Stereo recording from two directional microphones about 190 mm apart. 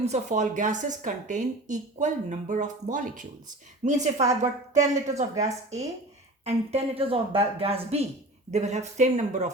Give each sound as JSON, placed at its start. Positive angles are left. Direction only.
{"t": 0.0, "sound": "speech", "side_deg": -35}